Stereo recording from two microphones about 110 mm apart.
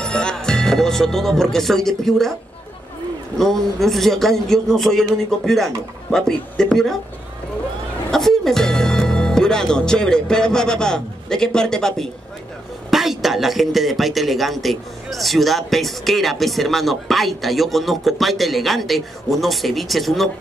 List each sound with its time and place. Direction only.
0.0 s speech: 5° left (ahead or behind)
3.3 s a man's voice: centre (ahead or behind)
8.1 s a man's voice: 5° left (ahead or behind)